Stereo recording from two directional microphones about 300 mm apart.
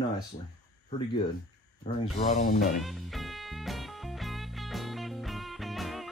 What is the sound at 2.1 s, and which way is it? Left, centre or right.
Speech, left.